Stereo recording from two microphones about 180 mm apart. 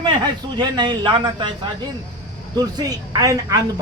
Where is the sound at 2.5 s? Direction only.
20° right (ahead or behind).